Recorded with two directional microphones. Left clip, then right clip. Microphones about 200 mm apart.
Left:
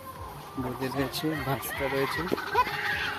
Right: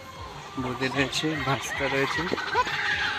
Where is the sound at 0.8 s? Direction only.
20° right (ahead or behind).